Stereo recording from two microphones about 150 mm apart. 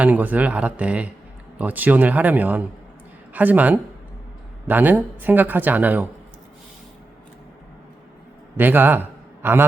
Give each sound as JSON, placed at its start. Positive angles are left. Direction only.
{"t": 0.0, "sound": "speech", "side_deg": -10}
{"t": 8.5, "sound": "a man's voice", "side_deg": -15}